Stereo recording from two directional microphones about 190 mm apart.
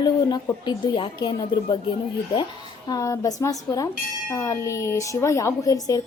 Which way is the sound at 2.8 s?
15° left (ahead or behind).